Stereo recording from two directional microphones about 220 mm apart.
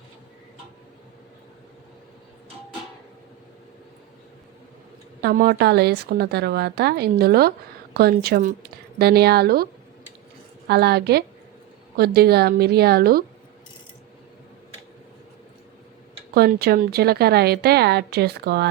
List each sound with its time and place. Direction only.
5.2 s a woman's voice: 45° right (ahead or behind)
10.7 s a woman's voice: 45° right (ahead or behind)
16.3 s a woman's voice: 45° right (ahead or behind)